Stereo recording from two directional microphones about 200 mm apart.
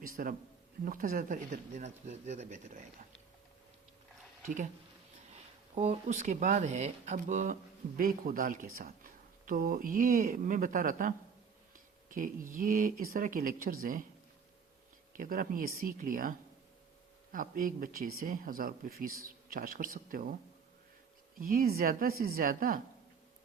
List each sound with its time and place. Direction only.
0.0 s a sound: 45° right (ahead or behind)
0.9 s speech: 45° right (ahead or behind)
4.4 s speech: 40° right (ahead or behind)
5.7 s speech: 30° right (ahead or behind)
15.1 s speech: 45° right (ahead or behind)
17.3 s speech: 45° right (ahead or behind)
21.3 s speech: 45° right (ahead or behind)